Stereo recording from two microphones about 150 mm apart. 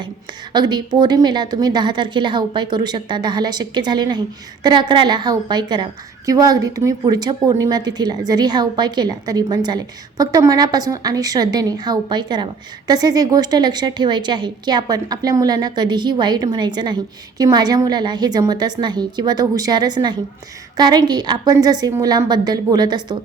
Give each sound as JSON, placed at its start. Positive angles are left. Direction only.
{"t": 0.5, "sound": "a woman's voice", "side_deg": -30}